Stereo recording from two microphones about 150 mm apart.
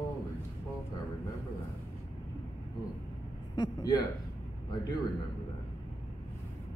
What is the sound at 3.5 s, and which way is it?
Speech, 25° left (ahead or behind).